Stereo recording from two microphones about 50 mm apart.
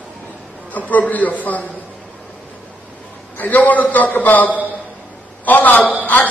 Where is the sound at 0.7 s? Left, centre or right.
Left.